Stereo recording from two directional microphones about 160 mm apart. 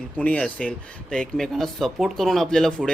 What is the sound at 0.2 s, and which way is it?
A man's voice, 10° left (ahead or behind).